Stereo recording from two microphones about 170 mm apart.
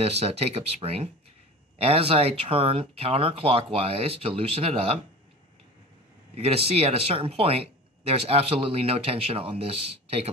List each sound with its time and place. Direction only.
0.0 s speech: 35° right (ahead or behind)
6.3 s speech: 35° right (ahead or behind)